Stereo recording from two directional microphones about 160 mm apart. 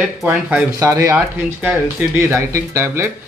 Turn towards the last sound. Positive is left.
turn(degrees=-15)  # may be behind; listen again after turning